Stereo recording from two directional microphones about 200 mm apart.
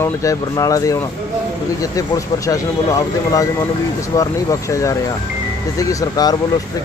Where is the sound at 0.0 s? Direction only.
15° left (ahead or behind).